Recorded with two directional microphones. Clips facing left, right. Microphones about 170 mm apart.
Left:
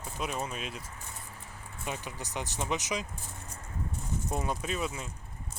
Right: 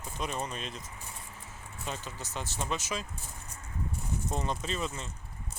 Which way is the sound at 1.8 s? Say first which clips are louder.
Left 1 dB; 10° left (ahead or behind).